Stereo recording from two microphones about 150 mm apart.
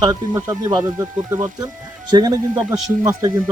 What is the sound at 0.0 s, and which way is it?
Speech, 25° right (ahead or behind).